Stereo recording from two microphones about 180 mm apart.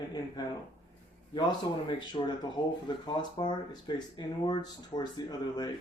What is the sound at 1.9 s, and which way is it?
Speech, 25° left (ahead or behind).